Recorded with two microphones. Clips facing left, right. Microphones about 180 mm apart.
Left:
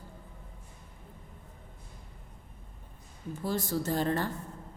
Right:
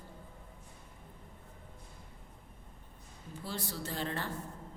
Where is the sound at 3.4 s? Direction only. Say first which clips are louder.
Left 9 dB; 45° left (ahead or behind).